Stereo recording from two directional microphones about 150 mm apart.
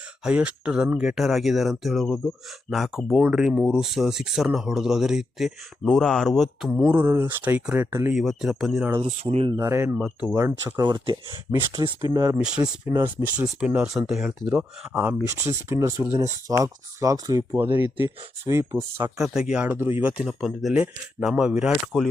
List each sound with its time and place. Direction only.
0.3 s speech: 10° right (ahead or behind)
6.7 s speech: 10° right (ahead or behind)
8.1 s speech: centre (ahead or behind)
9.2 s speech: 40° right (ahead or behind)
9.6 s speech: 20° right (ahead or behind)
10.0 s speech: 5° right (ahead or behind)
10.3 s speech: 20° right (ahead or behind)
12.4 s speech: 5° right (ahead or behind)
12.9 s speech: 20° right (ahead or behind)
13.6 s speech: 5° right (ahead or behind)
14.5 s speech: 15° right (ahead or behind)
19.2 s speech: 5° right (ahead or behind)